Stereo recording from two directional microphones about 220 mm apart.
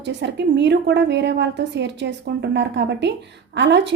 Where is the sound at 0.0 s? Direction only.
55° right (ahead or behind).